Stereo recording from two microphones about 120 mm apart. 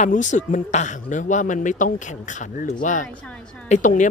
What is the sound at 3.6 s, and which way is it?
Speech, 85° left.